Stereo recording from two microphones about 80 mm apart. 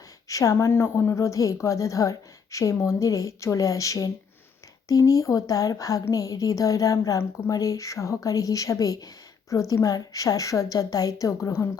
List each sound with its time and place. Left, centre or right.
0.3 s a woman's voice: left